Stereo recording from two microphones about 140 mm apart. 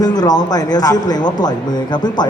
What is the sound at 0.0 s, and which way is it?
A man's voice, 25° left (ahead or behind).